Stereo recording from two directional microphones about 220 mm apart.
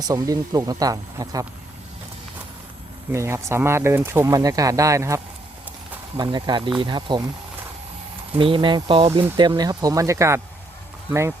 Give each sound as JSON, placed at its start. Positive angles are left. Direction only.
{"t": 0.1, "sound": "speech", "side_deg": -15}
{"t": 3.1, "sound": "speech", "side_deg": -10}
{"t": 8.4, "sound": "speech", "side_deg": -25}